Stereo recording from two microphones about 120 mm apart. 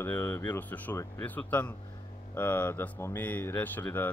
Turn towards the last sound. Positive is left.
turn(degrees=15)  # may be behind; listen again after turning